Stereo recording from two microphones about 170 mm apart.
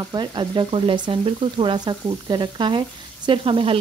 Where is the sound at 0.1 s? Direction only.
25° right (ahead or behind).